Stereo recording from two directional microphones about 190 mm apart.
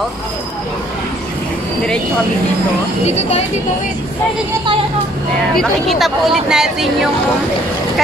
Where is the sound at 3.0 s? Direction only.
35° left (ahead or behind).